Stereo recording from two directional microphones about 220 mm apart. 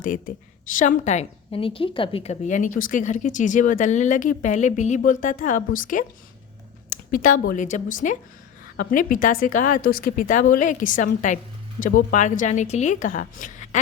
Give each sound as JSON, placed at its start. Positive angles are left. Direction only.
{"t": 0.0, "sound": "a woman's voice", "side_deg": 35}